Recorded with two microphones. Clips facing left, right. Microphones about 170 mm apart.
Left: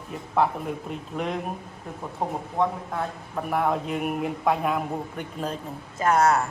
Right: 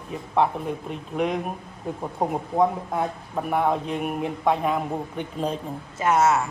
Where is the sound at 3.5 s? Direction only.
Centre (ahead or behind).